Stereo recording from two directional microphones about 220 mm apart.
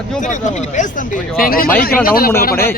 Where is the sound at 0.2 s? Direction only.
35° left (ahead or behind).